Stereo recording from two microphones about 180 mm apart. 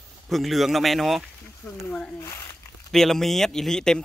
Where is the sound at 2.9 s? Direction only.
Centre (ahead or behind).